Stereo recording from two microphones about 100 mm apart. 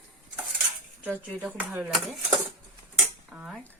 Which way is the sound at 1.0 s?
15° right (ahead or behind).